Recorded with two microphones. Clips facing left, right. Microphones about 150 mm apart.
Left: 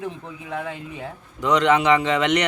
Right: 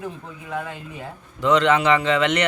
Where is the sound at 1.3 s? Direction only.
15° left (ahead or behind).